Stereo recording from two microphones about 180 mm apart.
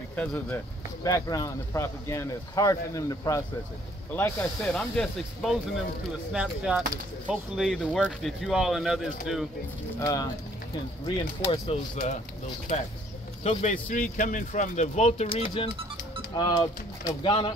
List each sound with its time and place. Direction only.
0.1 s speech: 5° left (ahead or behind)
1.0 s speech: 20° left (ahead or behind); by 9.5 s centre (ahead or behind)
9.9 s speech: 20° left (ahead or behind)
11.5 s speech: 30° left (ahead or behind)
13.4 s speech: 35° left (ahead or behind)
16.3 s speech: 20° left (ahead or behind)